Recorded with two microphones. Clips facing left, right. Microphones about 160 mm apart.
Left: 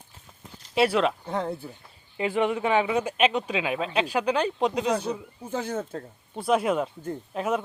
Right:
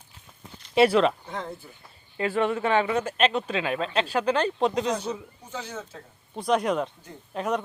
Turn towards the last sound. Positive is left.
turn(degrees=5)  # may be behind; listen again after turning